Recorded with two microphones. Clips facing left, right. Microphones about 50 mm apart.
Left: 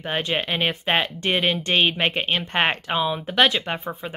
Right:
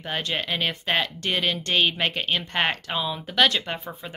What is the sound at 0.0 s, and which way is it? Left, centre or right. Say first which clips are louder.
Speech: left 3 dB; left.